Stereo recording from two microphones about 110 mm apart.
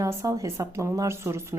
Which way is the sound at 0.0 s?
30° right (ahead or behind).